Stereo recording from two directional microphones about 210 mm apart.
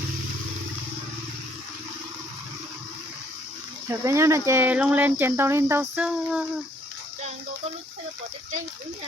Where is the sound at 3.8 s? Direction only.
15° right (ahead or behind).